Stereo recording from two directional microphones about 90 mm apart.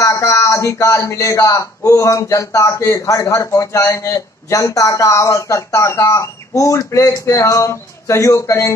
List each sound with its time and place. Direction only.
0.0 s speech: 35° left (ahead or behind)